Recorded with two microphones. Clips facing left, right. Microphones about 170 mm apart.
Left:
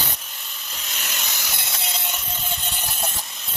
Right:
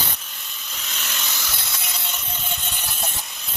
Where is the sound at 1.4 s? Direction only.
20° left (ahead or behind).